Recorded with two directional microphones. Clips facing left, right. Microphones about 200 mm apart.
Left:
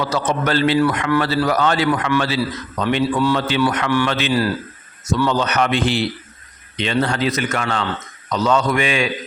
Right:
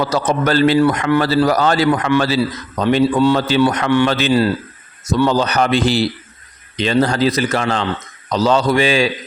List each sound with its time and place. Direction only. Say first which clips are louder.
0.0 s speech: right 3 dB; 40° right (ahead or behind)
0.8 s a man's voice: right 3 dB; 25° right (ahead or behind)
5.0 s speech: right 3 dB; 35° right (ahead or behind)